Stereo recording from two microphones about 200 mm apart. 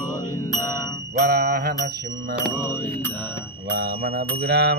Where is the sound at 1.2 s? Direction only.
50° right (ahead or behind).